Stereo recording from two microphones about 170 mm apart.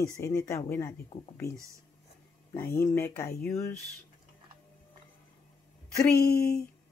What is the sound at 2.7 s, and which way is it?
Speech, 15° left (ahead or behind).